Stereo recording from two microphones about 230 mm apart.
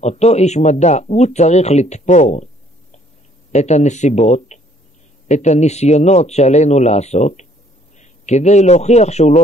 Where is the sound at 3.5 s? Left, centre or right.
Left.